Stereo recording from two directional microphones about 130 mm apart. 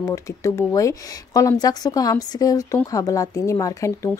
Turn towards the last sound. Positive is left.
turn(degrees=25)  # may be behind; listen again after turning